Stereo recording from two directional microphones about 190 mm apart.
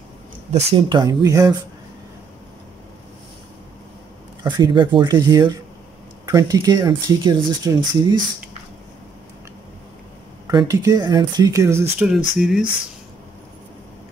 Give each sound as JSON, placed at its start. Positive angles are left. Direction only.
{"t": 0.5, "sound": "speech", "side_deg": -35}
{"t": 4.4, "sound": "speech", "side_deg": -20}
{"t": 10.4, "sound": "speech", "side_deg": -20}
{"t": 12.4, "sound": "speech", "side_deg": 0}